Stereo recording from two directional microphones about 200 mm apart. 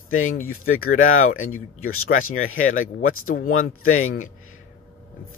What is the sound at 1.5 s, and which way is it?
Speech, 90° left.